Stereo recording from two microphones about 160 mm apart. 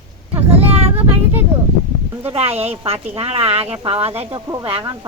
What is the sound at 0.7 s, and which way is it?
Vehicle, 40° right (ahead or behind).